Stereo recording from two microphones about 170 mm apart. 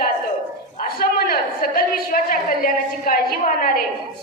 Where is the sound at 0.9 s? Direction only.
60° left (ahead or behind).